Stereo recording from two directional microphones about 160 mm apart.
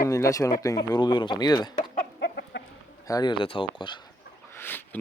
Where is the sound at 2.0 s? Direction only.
90° left.